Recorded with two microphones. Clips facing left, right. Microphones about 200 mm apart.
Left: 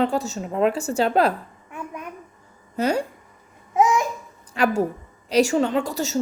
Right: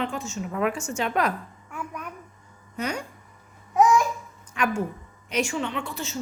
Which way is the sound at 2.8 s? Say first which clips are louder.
Left 8 dB; 35° left (ahead or behind).